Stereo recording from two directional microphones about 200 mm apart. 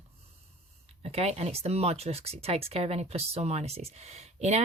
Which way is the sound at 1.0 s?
30° right (ahead or behind).